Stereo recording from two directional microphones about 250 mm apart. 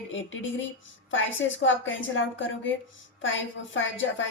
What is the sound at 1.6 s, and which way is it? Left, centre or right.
A woman's voice, left.